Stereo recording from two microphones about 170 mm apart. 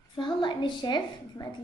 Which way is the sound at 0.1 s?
30° left (ahead or behind).